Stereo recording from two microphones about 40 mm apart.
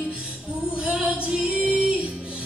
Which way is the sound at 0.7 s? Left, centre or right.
Right.